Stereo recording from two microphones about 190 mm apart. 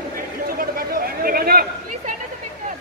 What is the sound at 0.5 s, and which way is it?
Chatter, 50° right (ahead or behind).